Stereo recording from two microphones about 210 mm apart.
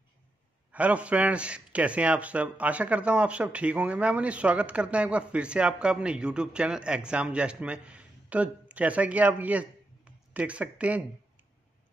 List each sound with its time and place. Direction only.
0.7 s a man's voice: 5° right (ahead or behind)